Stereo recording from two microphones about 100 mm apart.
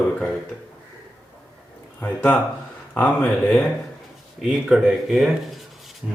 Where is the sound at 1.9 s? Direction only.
15° left (ahead or behind).